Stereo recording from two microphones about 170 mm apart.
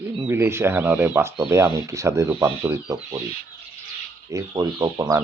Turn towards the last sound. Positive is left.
turn(degrees=-20)  # may be behind; listen again after turning